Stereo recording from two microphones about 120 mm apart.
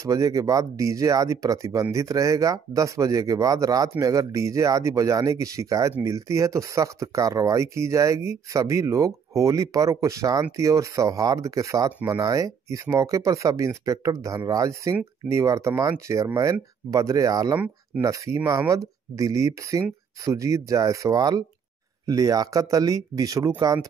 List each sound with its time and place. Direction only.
0.0 s speech: 25° right (ahead or behind)